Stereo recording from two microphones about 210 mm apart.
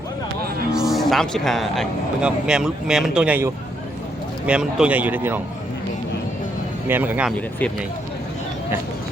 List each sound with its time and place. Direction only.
0.7 s a man's voice: centre (ahead or behind)
6.8 s a man's voice: 10° right (ahead or behind)